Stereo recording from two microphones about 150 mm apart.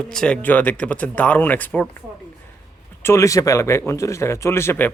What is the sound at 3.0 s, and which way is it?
Speech, 20° left (ahead or behind).